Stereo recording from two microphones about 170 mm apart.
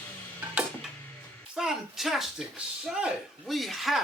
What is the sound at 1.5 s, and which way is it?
Speech, 5° right (ahead or behind).